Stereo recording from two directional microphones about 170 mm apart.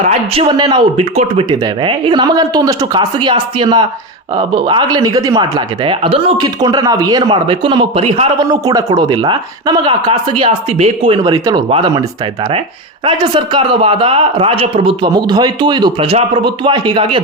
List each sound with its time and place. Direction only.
0.0 s a man's voice: 35° right (ahead or behind)
1.1 s a man's voice: 35° right (ahead or behind)
8.4 s a man's voice: 20° right (ahead or behind)
13.1 s a man's voice: 30° right (ahead or behind)